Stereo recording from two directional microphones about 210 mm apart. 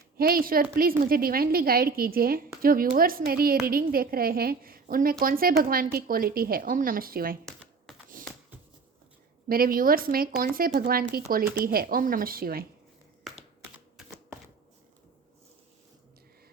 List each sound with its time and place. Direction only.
0.2 s a woman's voice: 45° right (ahead or behind)
7.9 s typing: centre (ahead or behind)
9.5 s a woman's voice: 45° right (ahead or behind)
13.2 s typing: centre (ahead or behind)